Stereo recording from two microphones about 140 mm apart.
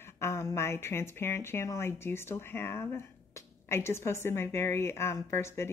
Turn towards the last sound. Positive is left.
turn(degrees=20)  # may be behind; listen again after turning